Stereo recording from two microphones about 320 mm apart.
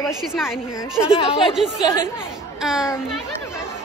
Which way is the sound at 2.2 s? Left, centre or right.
Centre.